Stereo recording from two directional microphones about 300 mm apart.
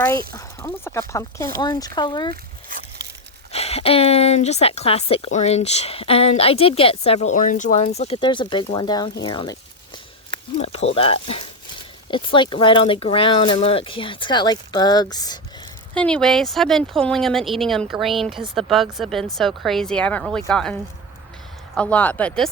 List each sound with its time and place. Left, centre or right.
0.3 s speech: centre
3.0 s a sound: right
3.5 s speech: centre
9.2 s a sound: centre
10.6 s speech: left; by 20.7 s centre
21.8 s speech: centre